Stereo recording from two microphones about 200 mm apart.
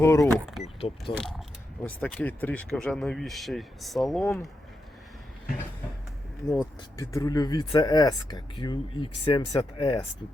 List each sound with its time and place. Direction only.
0.0 s speech: 10° left (ahead or behind)
0.6 s wild animals: 30° left (ahead or behind)
1.8 s speech: 5° left (ahead or behind)
6.6 s speech: 15° left (ahead or behind)